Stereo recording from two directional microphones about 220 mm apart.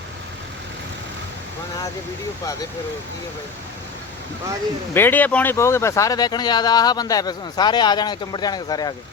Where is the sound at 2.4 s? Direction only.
15° left (ahead or behind).